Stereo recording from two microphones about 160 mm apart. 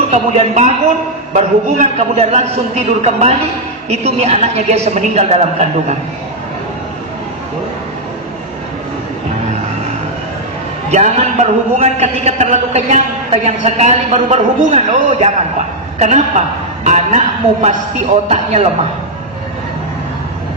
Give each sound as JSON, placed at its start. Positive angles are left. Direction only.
{"t": 0.1, "sound": "a man's voice", "side_deg": -45}
{"t": 10.9, "sound": "a man's voice", "side_deg": -45}